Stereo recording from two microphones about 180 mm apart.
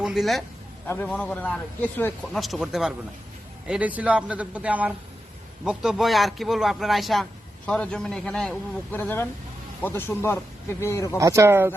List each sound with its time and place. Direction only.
0.0 s a man's voice: centre (ahead or behind); by 11.2 s 15° left (ahead or behind)
11.2 s a man's voice: 15° right (ahead or behind)